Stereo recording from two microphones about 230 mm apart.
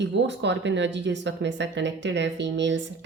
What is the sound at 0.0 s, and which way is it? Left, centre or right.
Speech, right.